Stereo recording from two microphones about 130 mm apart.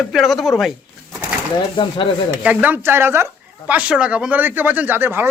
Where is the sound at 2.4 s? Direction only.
10° right (ahead or behind).